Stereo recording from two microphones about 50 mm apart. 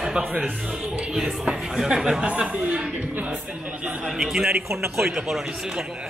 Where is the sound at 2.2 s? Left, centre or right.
Right.